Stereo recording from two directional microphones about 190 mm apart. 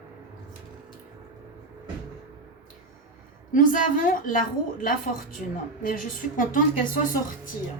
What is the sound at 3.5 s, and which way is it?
A woman's voice, 45° left (ahead or behind).